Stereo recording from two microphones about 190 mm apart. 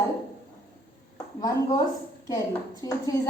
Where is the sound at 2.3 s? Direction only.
20° left (ahead or behind).